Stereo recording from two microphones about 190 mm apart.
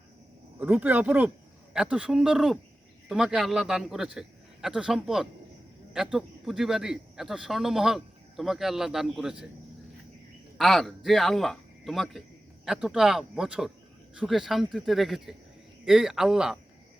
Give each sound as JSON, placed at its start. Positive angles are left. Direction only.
{"t": 0.6, "sound": "a man's voice", "side_deg": -10}
{"t": 10.6, "sound": "a man's voice", "side_deg": 0}